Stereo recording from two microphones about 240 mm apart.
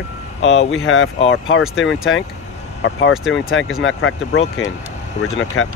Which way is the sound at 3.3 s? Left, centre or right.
Left.